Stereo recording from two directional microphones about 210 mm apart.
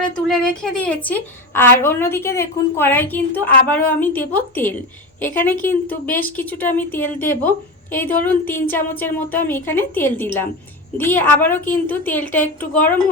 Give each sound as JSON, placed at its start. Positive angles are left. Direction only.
{"t": 0.3, "sound": "a woman's voice", "side_deg": 5}